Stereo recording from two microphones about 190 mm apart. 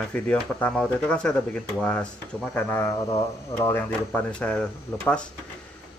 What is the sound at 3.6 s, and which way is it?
Speech, 10° left (ahead or behind).